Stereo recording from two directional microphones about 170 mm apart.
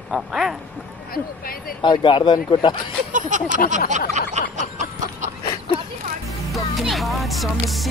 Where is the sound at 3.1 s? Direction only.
50° right (ahead or behind).